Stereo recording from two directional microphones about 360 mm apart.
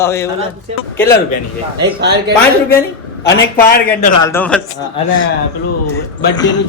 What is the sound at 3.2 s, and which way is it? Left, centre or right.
Speech, left.